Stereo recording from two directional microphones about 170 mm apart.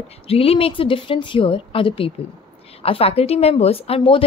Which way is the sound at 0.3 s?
35° left (ahead or behind).